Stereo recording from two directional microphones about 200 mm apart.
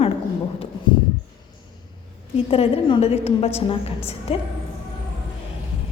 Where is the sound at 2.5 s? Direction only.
30° left (ahead or behind).